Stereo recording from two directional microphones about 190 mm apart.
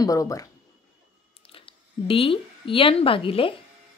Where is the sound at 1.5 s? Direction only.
30° left (ahead or behind).